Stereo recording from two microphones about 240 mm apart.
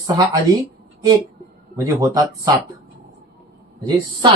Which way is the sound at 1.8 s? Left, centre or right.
Centre.